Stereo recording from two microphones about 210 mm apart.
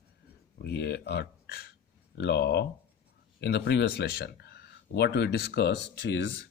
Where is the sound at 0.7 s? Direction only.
50° left (ahead or behind).